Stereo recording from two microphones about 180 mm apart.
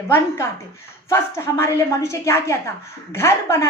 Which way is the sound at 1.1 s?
15° left (ahead or behind).